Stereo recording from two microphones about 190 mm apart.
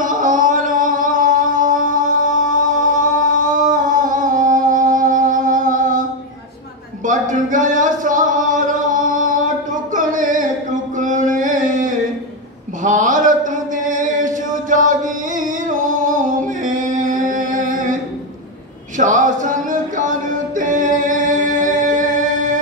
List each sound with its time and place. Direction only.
0.0 s music: 45° right (ahead or behind)
3.0 s music: 45° right (ahead or behind)
7.1 s a sound: 45° right (ahead or behind)
18.9 s music: 45° right (ahead or behind)